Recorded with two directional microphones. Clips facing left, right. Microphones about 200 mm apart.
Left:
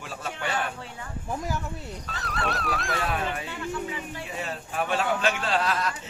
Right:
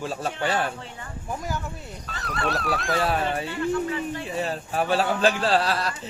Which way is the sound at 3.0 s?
35° right (ahead or behind).